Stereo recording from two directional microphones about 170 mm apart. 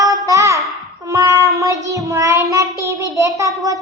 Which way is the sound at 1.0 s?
20° right (ahead or behind).